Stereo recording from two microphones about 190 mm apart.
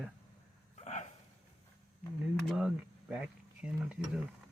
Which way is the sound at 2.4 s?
Centre (ahead or behind).